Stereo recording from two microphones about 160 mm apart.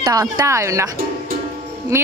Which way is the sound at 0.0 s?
20° right (ahead or behind).